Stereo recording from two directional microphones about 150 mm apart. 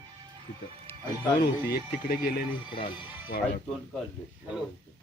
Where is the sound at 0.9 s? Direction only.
15° left (ahead or behind).